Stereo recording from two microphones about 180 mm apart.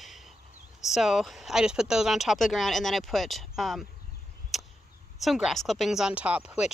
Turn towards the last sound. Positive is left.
turn(degrees=-5)  # may be behind; listen again after turning